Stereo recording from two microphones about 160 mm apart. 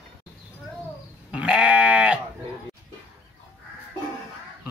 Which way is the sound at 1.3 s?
5° right (ahead or behind).